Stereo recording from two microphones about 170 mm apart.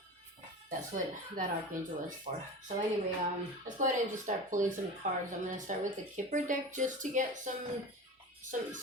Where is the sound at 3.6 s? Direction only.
45° right (ahead or behind).